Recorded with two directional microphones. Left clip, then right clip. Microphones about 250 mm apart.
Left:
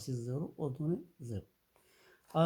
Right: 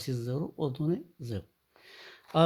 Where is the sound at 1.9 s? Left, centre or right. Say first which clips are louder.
Right 6 dB; right.